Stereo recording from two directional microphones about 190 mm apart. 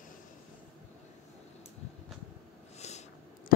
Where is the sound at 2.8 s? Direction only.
35° left (ahead or behind).